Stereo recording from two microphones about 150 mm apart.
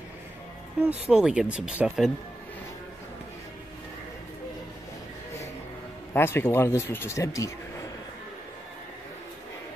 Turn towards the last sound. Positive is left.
turn(degrees=20)  # may be behind; listen again after turning